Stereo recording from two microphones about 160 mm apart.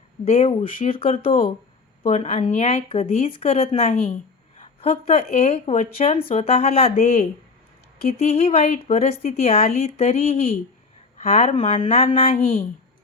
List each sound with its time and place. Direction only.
0.3 s speech: 40° left (ahead or behind)
0.6 s speech: 60° left (ahead or behind)
0.9 s speech: 35° left (ahead or behind)
2.0 s speech: 45° left (ahead or behind)
4.5 s a sound: 40° left (ahead or behind)
5.4 s speech: 40° left (ahead or behind)
6.1 s speech: 40° left (ahead or behind)